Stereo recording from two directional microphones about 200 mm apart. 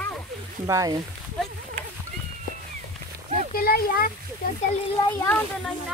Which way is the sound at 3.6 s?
50° left (ahead or behind).